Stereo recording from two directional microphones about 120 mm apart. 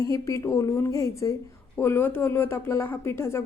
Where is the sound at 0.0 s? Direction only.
25° left (ahead or behind).